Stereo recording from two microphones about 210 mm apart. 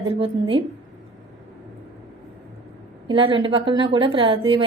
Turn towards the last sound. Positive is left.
turn(degrees=-25)  # may be behind; listen again after turning